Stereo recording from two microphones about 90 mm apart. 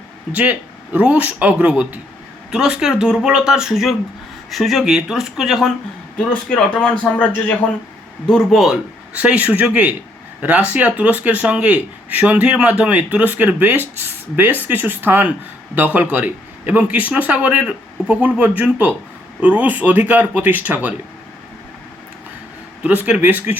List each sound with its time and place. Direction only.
0.3 s speech: 15° right (ahead or behind); by 5.7 s centre (ahead or behind)
6.1 s a man's voice: 10° left (ahead or behind)
8.3 s speech: 5° left (ahead or behind)
9.1 s speech: 15° right (ahead or behind)
22.8 s speech: 15° right (ahead or behind)